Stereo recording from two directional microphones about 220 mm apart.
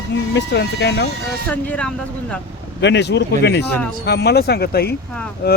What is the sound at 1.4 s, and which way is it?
Speech, 5° left (ahead or behind).